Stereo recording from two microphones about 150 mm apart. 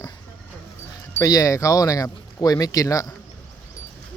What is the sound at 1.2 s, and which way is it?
Speech, 25° left (ahead or behind).